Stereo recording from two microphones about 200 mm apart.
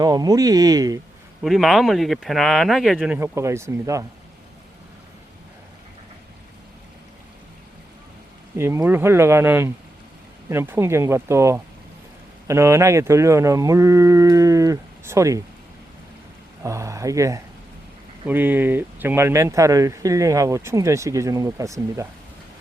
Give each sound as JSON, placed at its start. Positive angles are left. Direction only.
{"t": 0.0, "sound": "speech", "side_deg": -20}
{"t": 1.4, "sound": "speech", "side_deg": 0}
{"t": 8.5, "sound": "speech", "side_deg": -10}
{"t": 16.6, "sound": "speech", "side_deg": -15}